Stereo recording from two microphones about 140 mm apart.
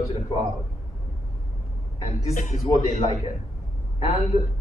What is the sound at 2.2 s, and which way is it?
A man's voice, 55° left (ahead or behind).